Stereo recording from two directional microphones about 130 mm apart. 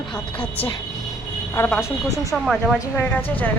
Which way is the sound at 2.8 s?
15° left (ahead or behind).